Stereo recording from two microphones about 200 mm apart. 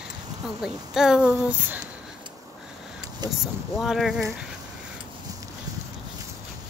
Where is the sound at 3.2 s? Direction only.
20° right (ahead or behind).